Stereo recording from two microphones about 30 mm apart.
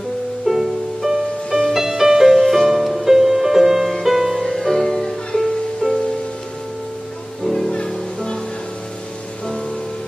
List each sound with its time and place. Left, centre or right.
0.5 s music: centre
2.3 s music: centre
4.5 s music: centre
4.8 s music: centre
5.8 s music: left